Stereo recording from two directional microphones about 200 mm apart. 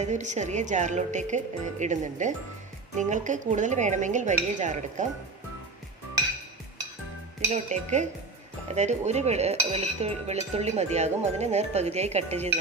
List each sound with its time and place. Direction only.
0.0 s speech: 35° right (ahead or behind)
7.5 s speech: 35° right (ahead or behind)